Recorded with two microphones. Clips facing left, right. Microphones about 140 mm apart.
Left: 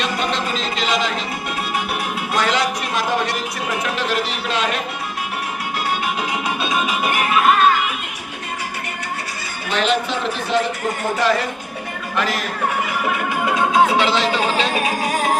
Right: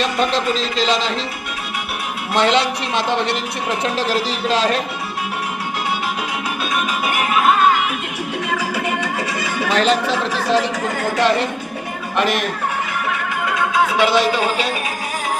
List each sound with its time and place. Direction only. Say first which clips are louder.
0.0 s speech: right 4 dB; 35° right (ahead or behind)
2.3 s a man's voice: right 4 dB; 25° right (ahead or behind)
6.6 s music: even; 5° right (ahead or behind)
9.4 s neigh: right 8 dB; 90° right
9.7 s speech: right 2 dB; 40° right (ahead or behind)
10.2 s speech: right 1 dB; 90° right
11.2 s a man's voice: right 3 dB; 20° right (ahead or behind)
13.1 s music: left 3 dB; 20° left (ahead or behind)
14.0 s speech: right 2 dB; 15° right (ahead or behind)